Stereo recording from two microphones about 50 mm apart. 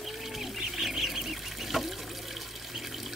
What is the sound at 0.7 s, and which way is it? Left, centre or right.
Duck, centre.